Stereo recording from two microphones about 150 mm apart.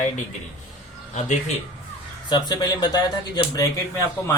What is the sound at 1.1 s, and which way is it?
Speech, 50° left (ahead or behind).